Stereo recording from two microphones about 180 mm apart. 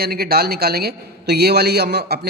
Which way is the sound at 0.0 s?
60° right (ahead or behind).